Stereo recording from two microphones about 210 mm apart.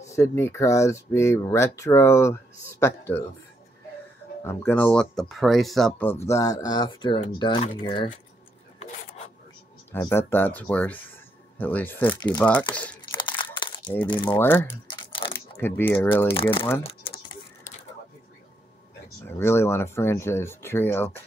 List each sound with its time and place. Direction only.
0.0 s speech: 15° left (ahead or behind)
4.5 s speech: 10° left (ahead or behind)
9.9 s speech: 10° left (ahead or behind)
13.2 s crumpling: 25° left (ahead or behind)
14.1 s speech: 20° left (ahead or behind)
14.4 s speech: 10° left (ahead or behind)
14.9 s crumpling: 20° left (ahead or behind)
15.6 s speech: 10° left (ahead or behind)
16.3 s speech: 25° left (ahead or behind)
19.2 s speech: 10° left (ahead or behind)